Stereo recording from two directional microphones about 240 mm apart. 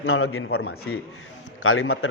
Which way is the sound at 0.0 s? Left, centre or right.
Left.